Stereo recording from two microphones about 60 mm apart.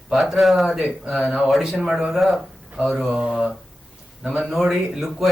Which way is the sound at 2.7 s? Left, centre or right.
Centre.